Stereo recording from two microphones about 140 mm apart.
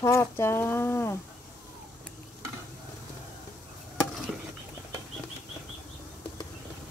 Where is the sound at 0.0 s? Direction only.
20° left (ahead or behind).